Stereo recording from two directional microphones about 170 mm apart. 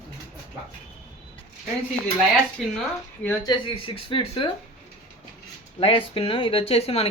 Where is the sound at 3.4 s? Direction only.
30° left (ahead or behind).